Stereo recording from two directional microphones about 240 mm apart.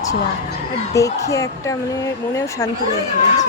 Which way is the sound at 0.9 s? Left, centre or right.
Centre.